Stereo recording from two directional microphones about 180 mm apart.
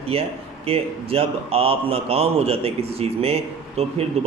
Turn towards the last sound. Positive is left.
turn(degrees=-35)  # may be behind; listen again after turning